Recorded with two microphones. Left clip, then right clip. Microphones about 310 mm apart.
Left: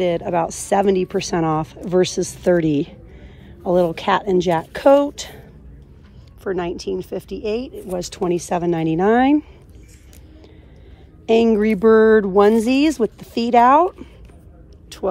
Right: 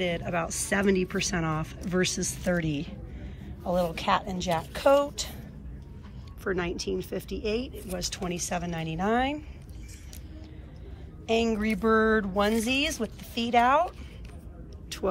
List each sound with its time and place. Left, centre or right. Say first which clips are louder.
0.0 s speech: left 10 dB; centre
3.7 s a sound: left 9 dB; left
6.4 s speech: left 7 dB; centre
11.2 s a sound: left 11 dB; centre
12.6 s speech: left 10 dB; centre
14.9 s speech: left 6 dB; centre